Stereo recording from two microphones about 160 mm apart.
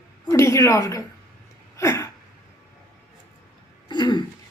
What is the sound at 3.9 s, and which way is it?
Throat clearing, 25° left (ahead or behind).